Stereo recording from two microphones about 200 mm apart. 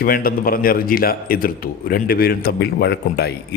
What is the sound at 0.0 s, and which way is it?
A man's voice, 45° left (ahead or behind).